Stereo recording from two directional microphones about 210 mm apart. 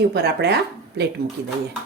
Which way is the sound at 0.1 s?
50° right (ahead or behind).